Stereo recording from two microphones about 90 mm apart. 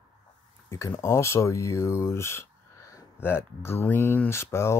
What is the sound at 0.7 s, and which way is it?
Speech, 35° left (ahead or behind).